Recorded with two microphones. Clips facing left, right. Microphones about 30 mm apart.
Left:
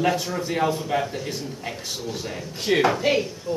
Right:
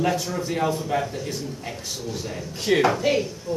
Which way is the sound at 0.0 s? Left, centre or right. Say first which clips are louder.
Left 1 dB; centre.